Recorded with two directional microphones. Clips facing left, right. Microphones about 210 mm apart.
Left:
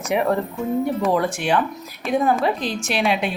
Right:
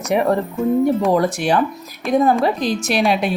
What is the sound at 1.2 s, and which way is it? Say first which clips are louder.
Speech: right 3 dB; 40° right (ahead or behind).